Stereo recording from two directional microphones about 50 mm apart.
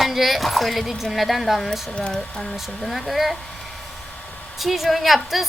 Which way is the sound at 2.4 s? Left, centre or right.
Centre.